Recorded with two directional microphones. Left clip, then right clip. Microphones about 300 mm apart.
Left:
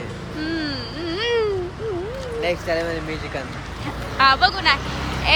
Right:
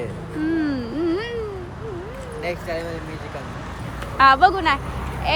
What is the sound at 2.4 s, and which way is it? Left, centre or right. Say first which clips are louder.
Speech: left 5 dB; centre.